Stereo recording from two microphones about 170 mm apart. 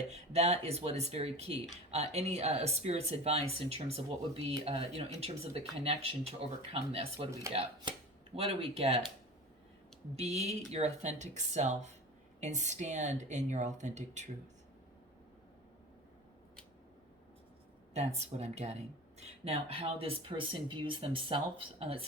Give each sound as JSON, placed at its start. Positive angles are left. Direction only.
{"t": 0.1, "sound": "speech", "side_deg": -40}
{"t": 10.2, "sound": "a woman's voice", "side_deg": -40}
{"t": 17.9, "sound": "speech", "side_deg": -40}